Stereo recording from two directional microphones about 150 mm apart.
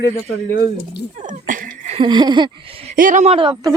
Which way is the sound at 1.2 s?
60° right (ahead or behind).